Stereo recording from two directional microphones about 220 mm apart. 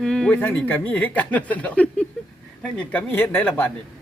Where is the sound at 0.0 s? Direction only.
Centre (ahead or behind).